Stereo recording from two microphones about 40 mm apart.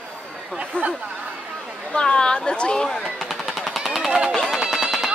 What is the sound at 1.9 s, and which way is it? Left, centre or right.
Speech, left.